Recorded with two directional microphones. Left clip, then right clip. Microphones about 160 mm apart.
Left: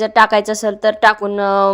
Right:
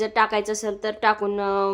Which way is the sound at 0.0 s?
35° left (ahead or behind).